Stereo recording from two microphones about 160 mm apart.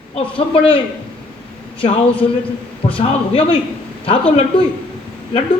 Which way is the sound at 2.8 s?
35° left (ahead or behind).